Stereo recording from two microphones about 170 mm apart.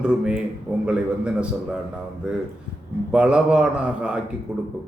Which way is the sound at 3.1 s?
5° right (ahead or behind).